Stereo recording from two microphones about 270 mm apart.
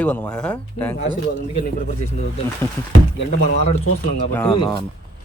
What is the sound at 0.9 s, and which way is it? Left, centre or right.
Speech, left.